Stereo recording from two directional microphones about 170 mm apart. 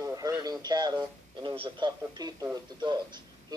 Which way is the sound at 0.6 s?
25° right (ahead or behind).